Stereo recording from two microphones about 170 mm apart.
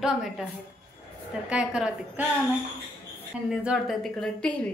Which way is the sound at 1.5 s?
5° right (ahead or behind).